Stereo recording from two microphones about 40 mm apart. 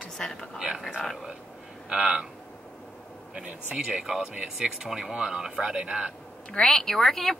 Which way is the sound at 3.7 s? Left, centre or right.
Right.